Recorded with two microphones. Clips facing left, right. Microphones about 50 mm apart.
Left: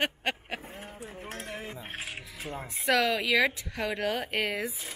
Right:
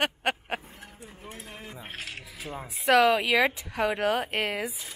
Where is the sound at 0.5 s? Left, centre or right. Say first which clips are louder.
Left 4 dB; centre.